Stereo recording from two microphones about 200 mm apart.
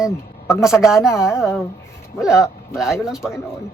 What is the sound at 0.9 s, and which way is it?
Speech, centre (ahead or behind).